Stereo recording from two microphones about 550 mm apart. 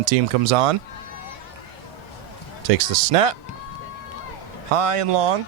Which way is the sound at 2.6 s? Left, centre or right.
Right.